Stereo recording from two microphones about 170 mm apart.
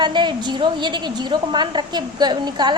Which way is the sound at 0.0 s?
25° right (ahead or behind).